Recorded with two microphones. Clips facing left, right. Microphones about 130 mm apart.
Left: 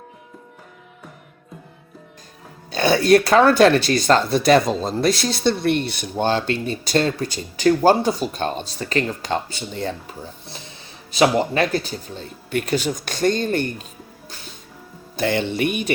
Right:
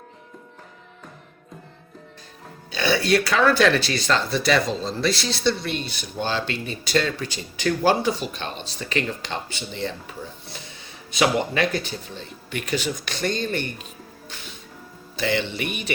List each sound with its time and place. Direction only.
2.7 s speech: 45° left (ahead or behind)
15.1 s speech: 50° left (ahead or behind)